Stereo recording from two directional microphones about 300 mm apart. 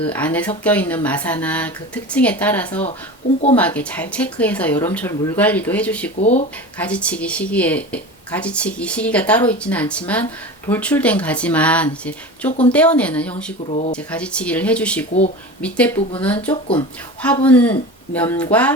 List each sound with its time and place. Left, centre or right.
0.0 s speech: centre
6.1 s speech: left
6.7 s speech: centre
12.5 s speech: left
12.7 s speech: centre
13.3 s speech: left
13.9 s speech: centre